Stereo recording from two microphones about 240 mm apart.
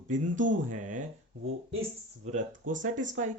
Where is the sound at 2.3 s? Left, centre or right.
Right.